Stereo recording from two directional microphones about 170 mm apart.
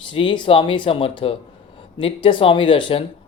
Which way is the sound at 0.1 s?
30° left (ahead or behind).